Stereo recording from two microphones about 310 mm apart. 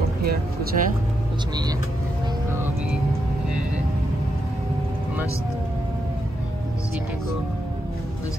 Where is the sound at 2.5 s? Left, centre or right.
Centre.